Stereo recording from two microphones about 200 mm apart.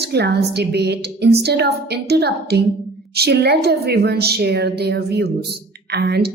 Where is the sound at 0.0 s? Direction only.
55° right (ahead or behind).